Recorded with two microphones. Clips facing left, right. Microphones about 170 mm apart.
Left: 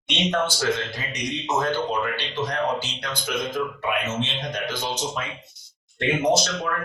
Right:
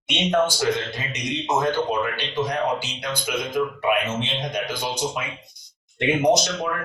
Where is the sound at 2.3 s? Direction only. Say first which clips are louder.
Right 2 dB; 10° right (ahead or behind).